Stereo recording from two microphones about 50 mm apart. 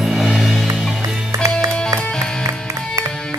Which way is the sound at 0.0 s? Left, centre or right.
Centre.